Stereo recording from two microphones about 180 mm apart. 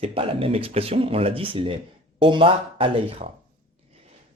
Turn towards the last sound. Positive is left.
turn(degrees=-30)  # may be behind; listen again after turning